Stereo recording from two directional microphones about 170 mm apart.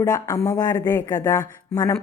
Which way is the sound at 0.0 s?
20° left (ahead or behind).